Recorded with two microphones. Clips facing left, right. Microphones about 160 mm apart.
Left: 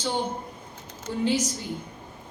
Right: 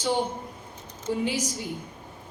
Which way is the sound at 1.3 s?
10° right (ahead or behind).